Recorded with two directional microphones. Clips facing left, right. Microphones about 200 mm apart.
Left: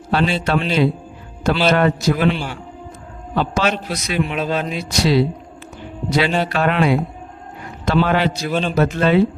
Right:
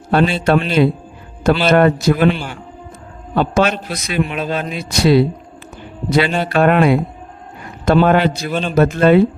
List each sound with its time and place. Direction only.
0.1 s a man's voice: 55° right (ahead or behind)
3.3 s a man's voice: 50° right (ahead or behind)
8.4 s a man's voice: 5° right (ahead or behind)
8.7 s a man's voice: 50° right (ahead or behind)